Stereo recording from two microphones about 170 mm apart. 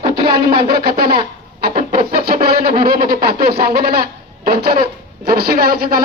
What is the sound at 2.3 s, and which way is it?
Speech, 65° right (ahead or behind).